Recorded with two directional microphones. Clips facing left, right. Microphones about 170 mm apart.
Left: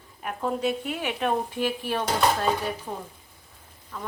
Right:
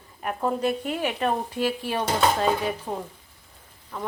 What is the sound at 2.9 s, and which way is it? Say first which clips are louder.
Speech: right 4 dB; 25° right (ahead or behind).